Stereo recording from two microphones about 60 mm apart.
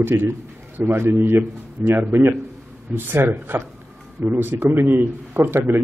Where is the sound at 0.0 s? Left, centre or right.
Right.